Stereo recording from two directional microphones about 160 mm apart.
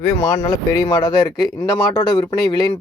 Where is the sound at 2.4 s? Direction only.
25° left (ahead or behind).